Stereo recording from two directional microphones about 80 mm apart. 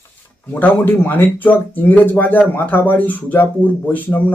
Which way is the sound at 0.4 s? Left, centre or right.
Left.